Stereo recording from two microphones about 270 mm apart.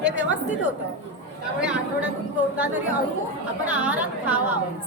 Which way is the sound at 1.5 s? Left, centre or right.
Centre.